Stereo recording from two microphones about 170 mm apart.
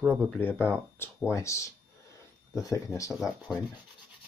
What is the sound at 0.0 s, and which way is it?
Speech, 5° right (ahead or behind).